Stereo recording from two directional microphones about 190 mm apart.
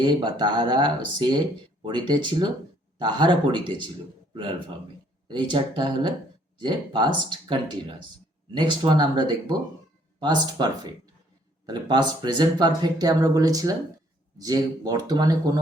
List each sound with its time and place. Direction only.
0.0 s speech: 25° right (ahead or behind)
5.3 s speech: 25° right (ahead or behind)